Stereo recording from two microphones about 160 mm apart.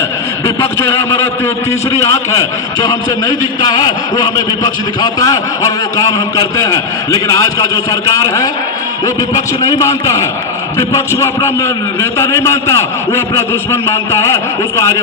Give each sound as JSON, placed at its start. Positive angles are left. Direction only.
{"t": 2.3, "sound": "a man's voice", "side_deg": 20}